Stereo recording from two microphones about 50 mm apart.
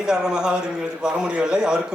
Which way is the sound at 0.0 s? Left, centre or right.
Centre.